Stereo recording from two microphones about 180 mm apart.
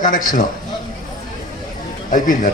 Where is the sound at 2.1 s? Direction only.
50° left (ahead or behind).